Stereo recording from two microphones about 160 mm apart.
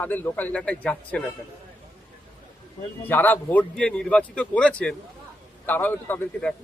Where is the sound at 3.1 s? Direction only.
10° left (ahead or behind).